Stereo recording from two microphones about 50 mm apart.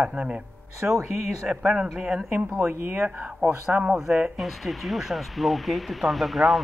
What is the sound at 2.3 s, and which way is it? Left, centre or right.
Speech, right.